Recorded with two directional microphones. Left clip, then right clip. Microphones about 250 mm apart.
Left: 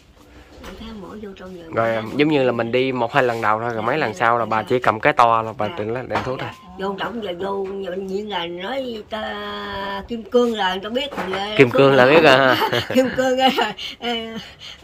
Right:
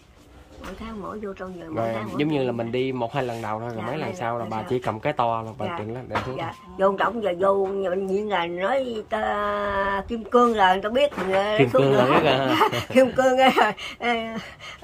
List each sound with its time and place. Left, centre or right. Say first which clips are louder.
1.8 s speech: left 7 dB; centre
7.2 s speech: right 5 dB; centre
11.5 s speech: left 8 dB; centre
12.5 s speech: even; centre